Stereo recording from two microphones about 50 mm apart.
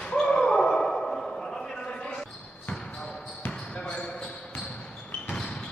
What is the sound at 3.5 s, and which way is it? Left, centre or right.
Basketball bounce, left.